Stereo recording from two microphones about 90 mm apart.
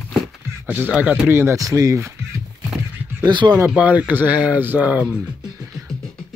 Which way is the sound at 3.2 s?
55° right (ahead or behind).